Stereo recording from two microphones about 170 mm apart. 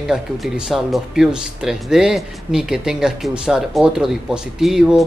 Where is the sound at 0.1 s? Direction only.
5° right (ahead or behind).